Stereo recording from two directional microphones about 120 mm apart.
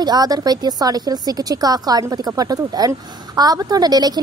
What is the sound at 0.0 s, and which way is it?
A woman's voice, 35° right (ahead or behind).